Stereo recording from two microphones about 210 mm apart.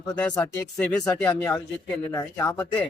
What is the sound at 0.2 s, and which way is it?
Speech, 10° left (ahead or behind).